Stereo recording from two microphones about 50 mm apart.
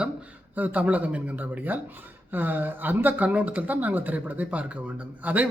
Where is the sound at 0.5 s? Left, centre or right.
Right.